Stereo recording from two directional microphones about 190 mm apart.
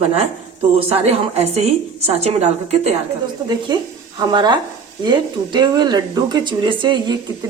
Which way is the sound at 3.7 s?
20° right (ahead or behind).